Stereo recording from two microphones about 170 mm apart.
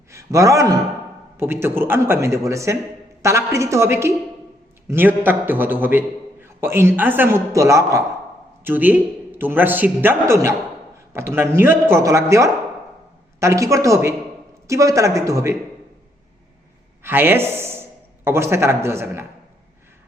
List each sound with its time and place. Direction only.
0.1 s a man's voice: 20° right (ahead or behind)
17.0 s a man's voice: 10° right (ahead or behind)